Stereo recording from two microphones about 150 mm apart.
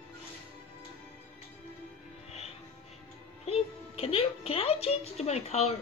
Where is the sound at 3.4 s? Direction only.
40° left (ahead or behind).